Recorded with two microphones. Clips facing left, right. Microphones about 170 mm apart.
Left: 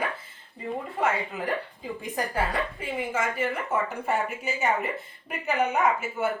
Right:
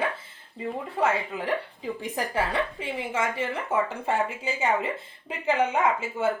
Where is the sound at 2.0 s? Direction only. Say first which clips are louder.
Even; 30° right (ahead or behind).